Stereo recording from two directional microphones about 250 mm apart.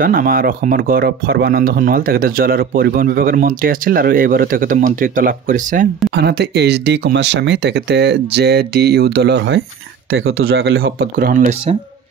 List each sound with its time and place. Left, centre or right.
0.0 s speech: right
10.1 s speech: right
11.1 s speech: right